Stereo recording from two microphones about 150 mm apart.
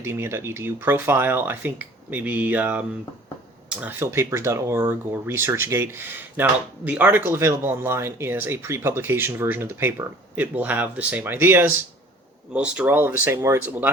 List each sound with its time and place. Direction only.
0.0 s speech: 15° right (ahead or behind)